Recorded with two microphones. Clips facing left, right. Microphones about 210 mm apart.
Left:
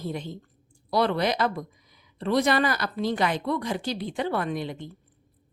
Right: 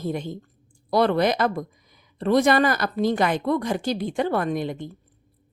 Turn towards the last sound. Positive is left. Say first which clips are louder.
# right 4 dB
turn(degrees=-45)  # may be behind; listen again after turning